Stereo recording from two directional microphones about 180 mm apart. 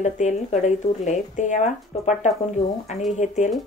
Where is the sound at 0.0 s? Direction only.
40° left (ahead or behind).